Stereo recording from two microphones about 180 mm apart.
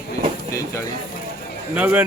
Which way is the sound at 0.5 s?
15° left (ahead or behind).